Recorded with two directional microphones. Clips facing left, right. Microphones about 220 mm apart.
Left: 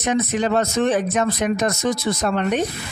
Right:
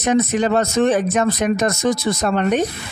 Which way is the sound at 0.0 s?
45° right (ahead or behind).